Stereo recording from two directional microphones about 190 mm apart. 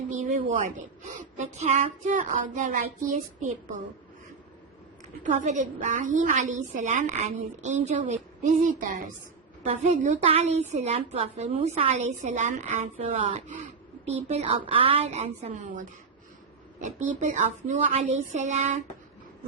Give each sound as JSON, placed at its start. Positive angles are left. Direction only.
{"t": 0.1, "sound": "a woman's voice", "side_deg": -40}
{"t": 5.2, "sound": "a woman's voice", "side_deg": -40}